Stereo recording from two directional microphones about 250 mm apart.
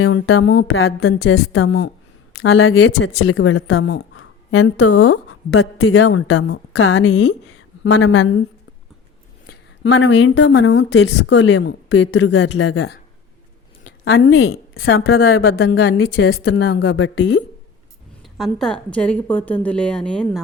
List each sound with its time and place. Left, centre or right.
0.0 s speech: left
9.5 s speech: left
14.0 s speech: left
16.2 s speech: left
18.2 s a woman's voice: centre